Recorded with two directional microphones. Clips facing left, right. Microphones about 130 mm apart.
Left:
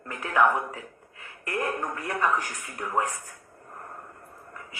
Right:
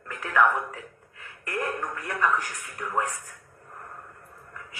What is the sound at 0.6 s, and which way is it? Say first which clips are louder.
Speech: left 1 dB; 25° left (ahead or behind).